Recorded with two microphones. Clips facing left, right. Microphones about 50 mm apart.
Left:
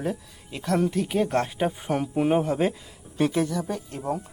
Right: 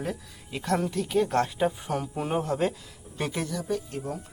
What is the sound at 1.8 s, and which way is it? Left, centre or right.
Speech, left.